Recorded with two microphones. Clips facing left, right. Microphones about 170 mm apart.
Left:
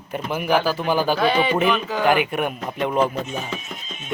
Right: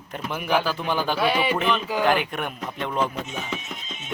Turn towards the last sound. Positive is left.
turn(degrees=-20)  # may be behind; listen again after turning